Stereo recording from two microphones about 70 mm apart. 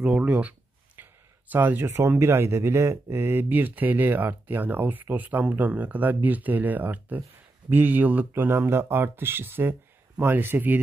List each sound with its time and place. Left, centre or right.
0.0 s speech: centre
1.0 s a sound: right
1.5 s speech: right